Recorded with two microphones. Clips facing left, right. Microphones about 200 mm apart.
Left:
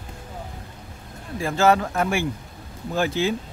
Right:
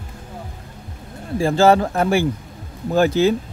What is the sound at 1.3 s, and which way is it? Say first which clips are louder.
Speech: right 5 dB; 30° right (ahead or behind).